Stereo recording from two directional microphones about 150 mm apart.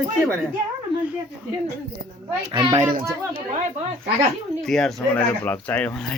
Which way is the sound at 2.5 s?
30° right (ahead or behind).